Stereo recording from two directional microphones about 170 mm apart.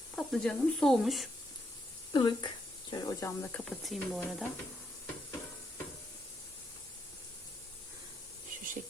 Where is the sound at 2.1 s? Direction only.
30° left (ahead or behind); by 4.2 s centre (ahead or behind).